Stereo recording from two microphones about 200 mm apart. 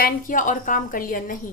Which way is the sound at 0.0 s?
40° left (ahead or behind).